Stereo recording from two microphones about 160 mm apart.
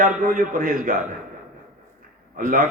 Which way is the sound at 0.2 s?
60° right (ahead or behind).